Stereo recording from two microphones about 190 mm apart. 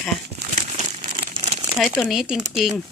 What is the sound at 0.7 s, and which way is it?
Crumpling, 35° right (ahead or behind).